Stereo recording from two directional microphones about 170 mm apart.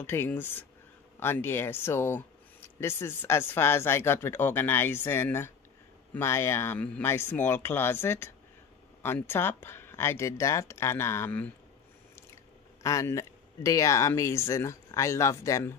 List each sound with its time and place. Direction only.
0.0 s speech: 15° left (ahead or behind)
12.8 s speech: 15° left (ahead or behind)